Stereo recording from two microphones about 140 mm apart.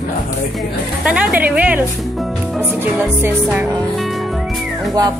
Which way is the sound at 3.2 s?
10° right (ahead or behind).